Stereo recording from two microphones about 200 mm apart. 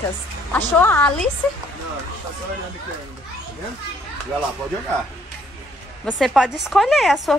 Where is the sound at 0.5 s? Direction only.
10° left (ahead or behind).